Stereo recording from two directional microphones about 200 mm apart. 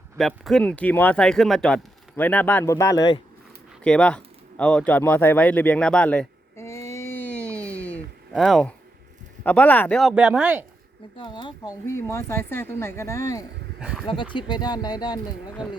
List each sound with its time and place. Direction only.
0.2 s speech: centre (ahead or behind); by 3.2 s 20° left (ahead or behind)
3.8 s a sound: 5° left (ahead or behind)
9.4 s speech: 10° left (ahead or behind)
11.2 s speech: 25° left (ahead or behind)
13.7 s speech: 5° right (ahead or behind)
14.1 s speech: 25° left (ahead or behind)